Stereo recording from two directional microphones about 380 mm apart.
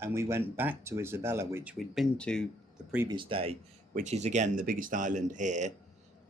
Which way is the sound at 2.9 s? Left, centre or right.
Centre.